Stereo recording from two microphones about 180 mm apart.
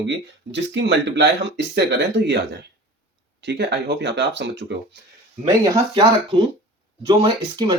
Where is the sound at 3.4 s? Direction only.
70° right (ahead or behind).